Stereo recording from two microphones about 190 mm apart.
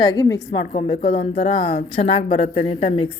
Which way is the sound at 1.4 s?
30° left (ahead or behind).